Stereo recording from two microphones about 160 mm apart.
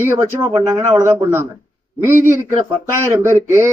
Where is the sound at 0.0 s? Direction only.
15° right (ahead or behind).